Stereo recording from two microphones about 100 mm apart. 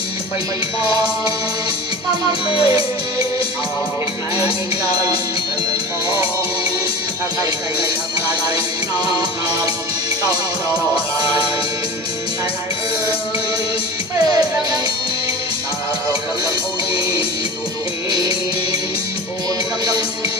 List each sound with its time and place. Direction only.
2.4 s music: 65° left (ahead or behind)
18.1 s music: 40° right (ahead or behind)